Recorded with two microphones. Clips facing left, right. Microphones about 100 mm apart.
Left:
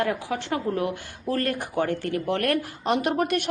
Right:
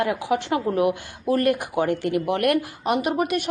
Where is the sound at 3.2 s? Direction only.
5° right (ahead or behind).